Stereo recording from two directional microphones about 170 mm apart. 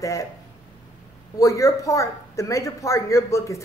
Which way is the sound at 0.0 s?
20° left (ahead or behind).